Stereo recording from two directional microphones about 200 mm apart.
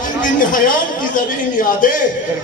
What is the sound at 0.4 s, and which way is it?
A man's voice, 40° left (ahead or behind).